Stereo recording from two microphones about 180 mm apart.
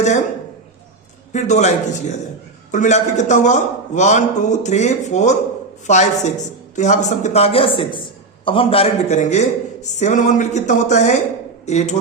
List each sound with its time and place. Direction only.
1.3 s a man's voice: 40° left (ahead or behind)